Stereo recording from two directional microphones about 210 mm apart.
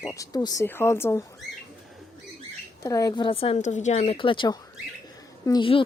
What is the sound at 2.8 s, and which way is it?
Speech, 15° left (ahead or behind).